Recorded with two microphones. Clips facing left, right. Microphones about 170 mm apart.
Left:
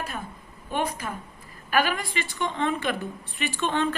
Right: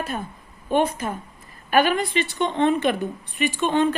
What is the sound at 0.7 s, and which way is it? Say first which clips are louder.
Speech: right 7 dB; 25° right (ahead or behind).